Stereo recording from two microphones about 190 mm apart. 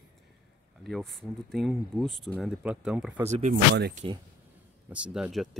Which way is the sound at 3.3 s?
35° right (ahead or behind).